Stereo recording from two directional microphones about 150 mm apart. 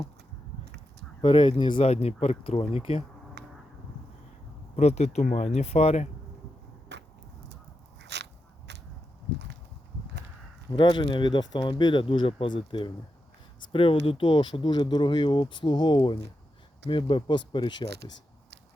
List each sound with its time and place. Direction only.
1.2 s speech: 35° left (ahead or behind)
4.8 s speech: 45° left (ahead or behind)
10.7 s speech: 30° left (ahead or behind)
17.8 s speech: 90° right